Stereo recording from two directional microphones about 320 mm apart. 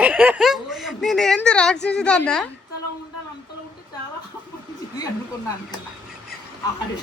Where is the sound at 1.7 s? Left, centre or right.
Left.